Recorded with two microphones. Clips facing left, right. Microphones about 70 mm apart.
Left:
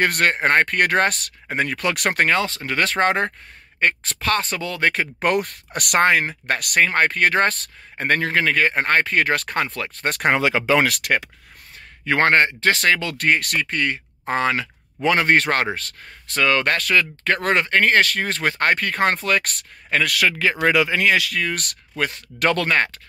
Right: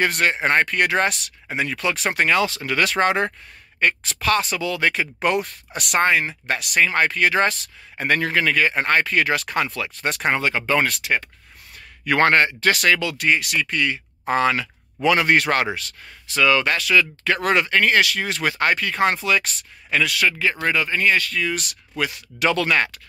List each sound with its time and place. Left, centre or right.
0.0 s speech: left
2.3 s speech: left
10.0 s speech: left
12.0 s speech: left
13.2 s speech: left
20.6 s speech: left
21.4 s speech: left